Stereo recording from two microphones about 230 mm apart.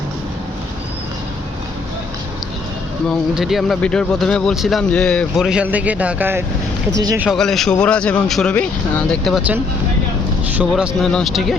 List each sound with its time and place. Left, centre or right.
3.1 s speech: centre
7.3 s speech: centre